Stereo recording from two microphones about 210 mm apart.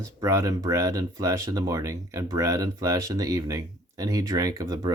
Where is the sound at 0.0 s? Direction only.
15° right (ahead or behind).